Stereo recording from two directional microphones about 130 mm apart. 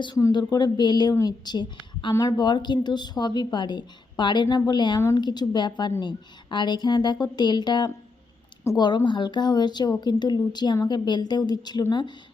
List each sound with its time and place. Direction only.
0.3 s a woman's voice: 35° left (ahead or behind)